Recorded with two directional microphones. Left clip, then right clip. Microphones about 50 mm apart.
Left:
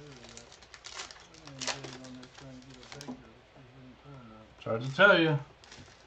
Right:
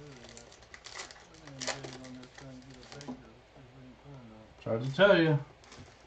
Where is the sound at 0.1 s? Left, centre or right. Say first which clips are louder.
Left 1 dB; centre.